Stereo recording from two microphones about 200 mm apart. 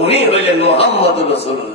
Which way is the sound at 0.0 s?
30° left (ahead or behind).